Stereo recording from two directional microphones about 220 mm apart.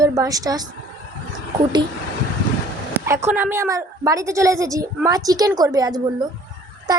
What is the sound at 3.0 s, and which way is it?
A woman's voice, 10° right (ahead or behind).